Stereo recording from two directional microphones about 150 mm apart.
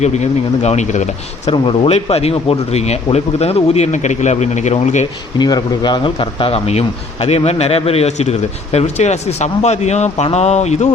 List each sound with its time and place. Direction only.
0.0 s speech: 50° left (ahead or behind)
1.5 s speech: 40° left (ahead or behind)
5.4 s speech: 30° left (ahead or behind); by 10.8 s 50° left (ahead or behind)